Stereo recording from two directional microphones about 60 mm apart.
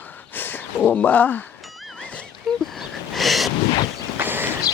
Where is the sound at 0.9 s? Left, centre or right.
Left.